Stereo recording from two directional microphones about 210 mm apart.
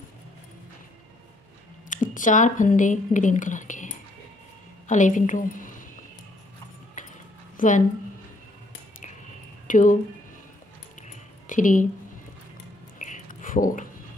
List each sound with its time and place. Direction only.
1.9 s a woman's voice: 40° left (ahead or behind)
7.5 s a woman's voice: 40° left (ahead or behind)
9.7 s speech: 40° left (ahead or behind)
11.0 s music: 35° left (ahead or behind)
13.0 s a sound: 40° left (ahead or behind)